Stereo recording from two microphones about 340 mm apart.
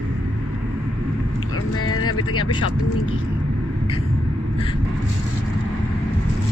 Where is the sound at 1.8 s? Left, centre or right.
Left.